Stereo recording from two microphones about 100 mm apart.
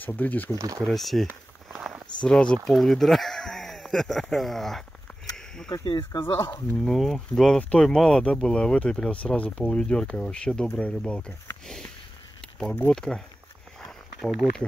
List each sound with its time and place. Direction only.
0.0 s speech: 15° left (ahead or behind)
0.6 s speech: 35° right (ahead or behind)
0.8 s speech: centre (ahead or behind)
1.7 s a sound: 10° right (ahead or behind)
2.2 s speech: 10° left (ahead or behind)
5.7 s speech: 45° left (ahead or behind)
6.8 s speech: centre (ahead or behind)
12.9 s speech: 5° left (ahead or behind)
13.7 s a sound: 5° left (ahead or behind)